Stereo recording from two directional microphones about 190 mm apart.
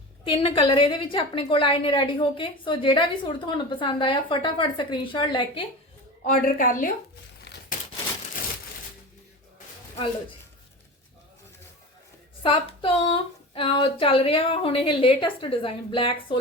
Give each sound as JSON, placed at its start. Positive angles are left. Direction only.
{"t": 0.3, "sound": "a woman's voice", "side_deg": 30}
{"t": 6.2, "sound": "a woman's voice", "side_deg": 45}
{"t": 12.4, "sound": "a woman's voice", "side_deg": 30}